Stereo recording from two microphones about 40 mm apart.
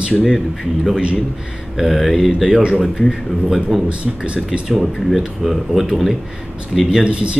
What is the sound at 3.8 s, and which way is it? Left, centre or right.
Speech, right.